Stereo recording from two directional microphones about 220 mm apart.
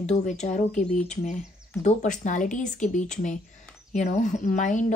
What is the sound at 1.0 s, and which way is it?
A woman's voice, 30° left (ahead or behind).